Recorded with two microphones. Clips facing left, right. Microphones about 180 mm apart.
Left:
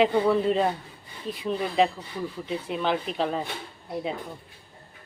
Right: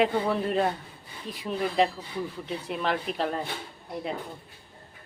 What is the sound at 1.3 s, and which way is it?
Speech, centre (ahead or behind).